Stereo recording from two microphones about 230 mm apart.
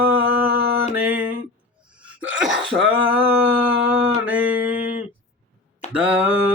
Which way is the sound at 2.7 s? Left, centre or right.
Centre.